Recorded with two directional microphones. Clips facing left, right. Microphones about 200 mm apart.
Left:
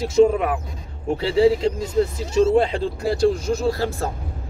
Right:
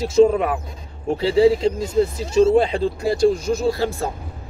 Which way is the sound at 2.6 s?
15° right (ahead or behind).